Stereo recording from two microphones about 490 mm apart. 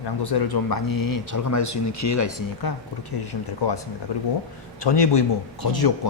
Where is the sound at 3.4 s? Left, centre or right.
Left.